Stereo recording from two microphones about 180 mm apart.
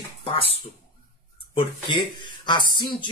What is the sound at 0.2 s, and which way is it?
Speech, 30° left (ahead or behind).